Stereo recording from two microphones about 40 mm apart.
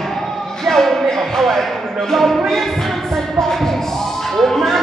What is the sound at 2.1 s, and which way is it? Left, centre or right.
Music, centre.